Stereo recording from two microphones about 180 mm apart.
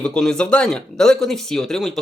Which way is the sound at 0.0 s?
5° left (ahead or behind).